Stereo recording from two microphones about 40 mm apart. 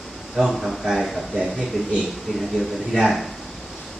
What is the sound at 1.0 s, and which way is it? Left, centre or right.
Speech, centre.